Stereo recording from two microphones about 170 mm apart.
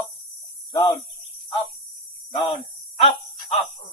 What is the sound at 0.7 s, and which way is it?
Speech, 30° left (ahead or behind).